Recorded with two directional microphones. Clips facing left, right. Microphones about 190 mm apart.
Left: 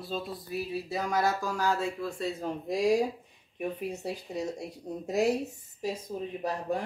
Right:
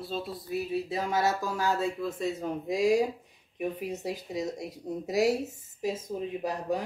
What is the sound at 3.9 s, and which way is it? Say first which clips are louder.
Speech: right 1 dB; 20° right (ahead or behind).